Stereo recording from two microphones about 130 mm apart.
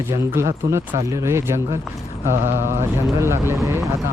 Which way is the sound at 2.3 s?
65° right (ahead or behind).